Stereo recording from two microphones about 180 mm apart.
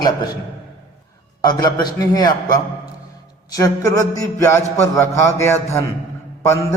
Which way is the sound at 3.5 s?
20° left (ahead or behind).